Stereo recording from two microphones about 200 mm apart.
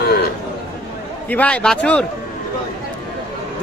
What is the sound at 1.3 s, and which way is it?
Speech, 5° left (ahead or behind).